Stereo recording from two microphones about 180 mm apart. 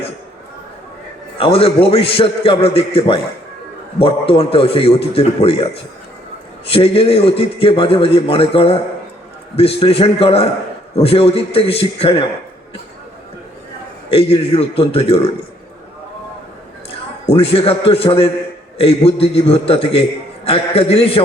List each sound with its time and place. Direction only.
1.4 s a man's voice: 30° left (ahead or behind)
6.7 s a man's voice: 30° left (ahead or behind)
14.1 s a man's voice: 30° left (ahead or behind)
16.9 s a man's voice: 35° left (ahead or behind)